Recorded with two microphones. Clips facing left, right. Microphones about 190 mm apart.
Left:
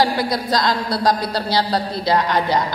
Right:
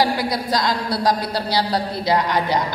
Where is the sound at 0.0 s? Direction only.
15° right (ahead or behind).